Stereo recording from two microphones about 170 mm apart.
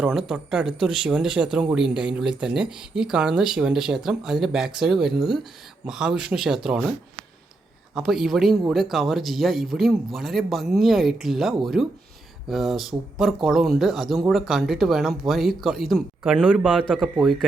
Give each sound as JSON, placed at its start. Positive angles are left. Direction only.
{"t": 0.0, "sound": "speech", "side_deg": -5}
{"t": 7.9, "sound": "speech", "side_deg": 0}